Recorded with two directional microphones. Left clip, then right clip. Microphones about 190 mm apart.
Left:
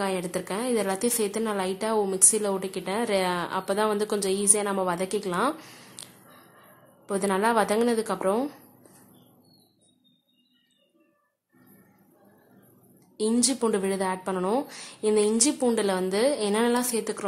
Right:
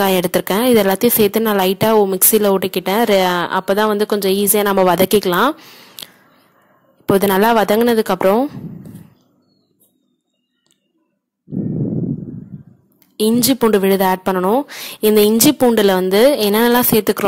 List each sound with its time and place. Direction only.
0.0 s speech: 45° right (ahead or behind)
5.6 s a sound: 25° right (ahead or behind)
7.1 s speech: 45° right (ahead or behind)
13.1 s speech: 40° right (ahead or behind)